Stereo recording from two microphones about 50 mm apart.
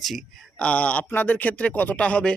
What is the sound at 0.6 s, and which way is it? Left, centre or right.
Speech, left.